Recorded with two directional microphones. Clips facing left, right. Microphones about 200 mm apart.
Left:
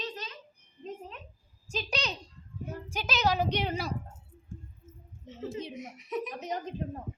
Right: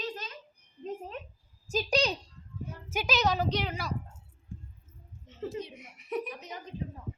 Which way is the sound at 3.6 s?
25° left (ahead or behind).